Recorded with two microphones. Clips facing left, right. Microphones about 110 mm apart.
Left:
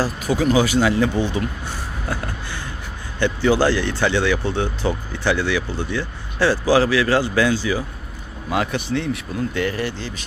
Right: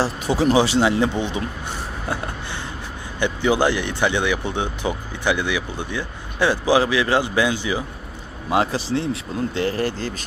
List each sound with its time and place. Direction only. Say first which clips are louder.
0.0 s speech: even; 30° right (ahead or behind)
9.7 s speech: right 2 dB; 45° right (ahead or behind)